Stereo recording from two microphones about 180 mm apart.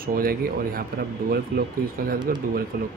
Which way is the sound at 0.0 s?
55° right (ahead or behind).